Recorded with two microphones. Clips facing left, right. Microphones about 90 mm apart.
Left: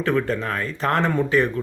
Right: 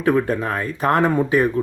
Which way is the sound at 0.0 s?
15° right (ahead or behind).